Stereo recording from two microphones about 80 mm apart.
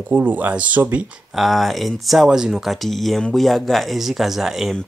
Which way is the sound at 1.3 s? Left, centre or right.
Centre.